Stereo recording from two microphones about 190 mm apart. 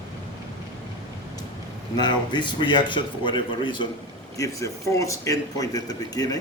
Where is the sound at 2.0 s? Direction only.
25° left (ahead or behind).